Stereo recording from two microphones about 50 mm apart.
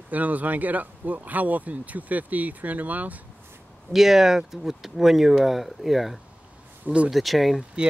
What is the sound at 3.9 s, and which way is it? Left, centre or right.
Speech, centre.